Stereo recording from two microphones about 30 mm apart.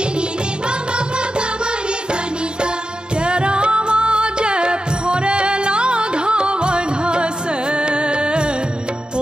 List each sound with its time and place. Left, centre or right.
3.3 s music: right